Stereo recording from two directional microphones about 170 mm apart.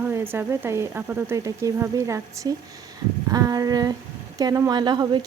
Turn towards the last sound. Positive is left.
turn(degrees=-25)  # may be behind; listen again after turning